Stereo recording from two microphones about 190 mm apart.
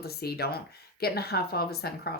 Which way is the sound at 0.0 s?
55° left (ahead or behind).